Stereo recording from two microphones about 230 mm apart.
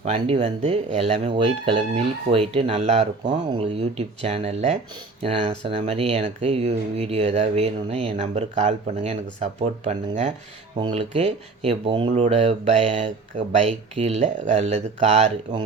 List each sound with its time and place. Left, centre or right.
0.0 s speech: right